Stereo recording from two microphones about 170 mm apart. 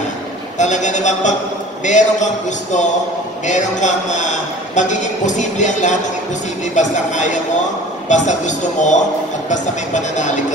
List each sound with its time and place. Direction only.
0.6 s a man's voice: 45° left (ahead or behind)